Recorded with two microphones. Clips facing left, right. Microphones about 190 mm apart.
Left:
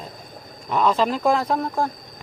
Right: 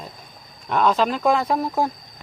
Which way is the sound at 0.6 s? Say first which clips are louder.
Even; centre (ahead or behind).